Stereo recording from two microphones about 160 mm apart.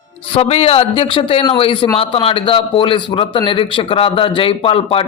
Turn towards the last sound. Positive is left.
turn(degrees=35)  # may be behind; listen again after turning